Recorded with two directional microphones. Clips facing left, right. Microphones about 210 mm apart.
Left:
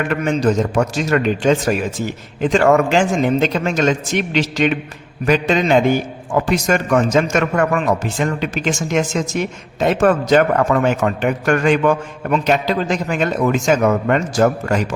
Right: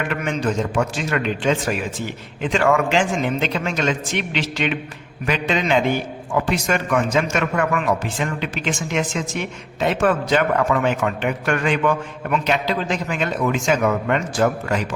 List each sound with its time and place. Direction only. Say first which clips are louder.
0.1 s a man's voice: left 6 dB; 40° left (ahead or behind)